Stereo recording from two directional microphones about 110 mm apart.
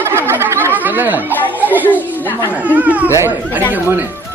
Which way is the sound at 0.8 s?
15° right (ahead or behind).